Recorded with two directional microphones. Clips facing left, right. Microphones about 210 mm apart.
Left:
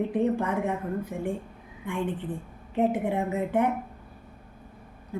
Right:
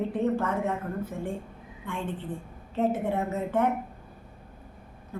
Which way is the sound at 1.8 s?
15° left (ahead or behind).